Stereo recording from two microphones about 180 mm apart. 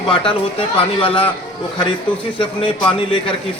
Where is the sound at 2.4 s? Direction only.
30° left (ahead or behind).